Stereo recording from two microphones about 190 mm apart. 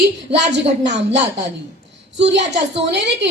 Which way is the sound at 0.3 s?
65° right (ahead or behind).